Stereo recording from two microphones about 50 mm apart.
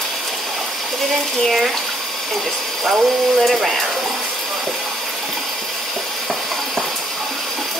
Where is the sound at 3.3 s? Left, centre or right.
Centre.